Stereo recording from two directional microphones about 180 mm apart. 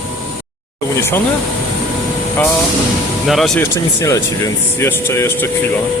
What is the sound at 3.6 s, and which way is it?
Speech, 15° left (ahead or behind).